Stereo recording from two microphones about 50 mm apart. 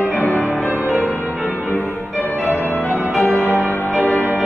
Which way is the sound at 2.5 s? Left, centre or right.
Left.